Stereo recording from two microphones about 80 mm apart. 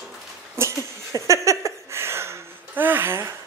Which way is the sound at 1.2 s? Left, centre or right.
Right.